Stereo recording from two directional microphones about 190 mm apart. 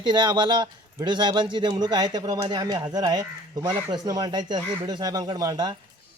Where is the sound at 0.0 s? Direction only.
25° right (ahead or behind).